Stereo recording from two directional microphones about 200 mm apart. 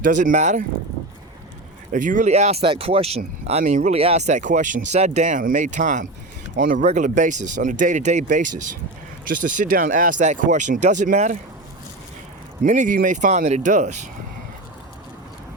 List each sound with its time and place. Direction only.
0.0 s speech: 40° right (ahead or behind)
1.9 s speech: 40° right (ahead or behind)
12.6 s speech: 40° right (ahead or behind)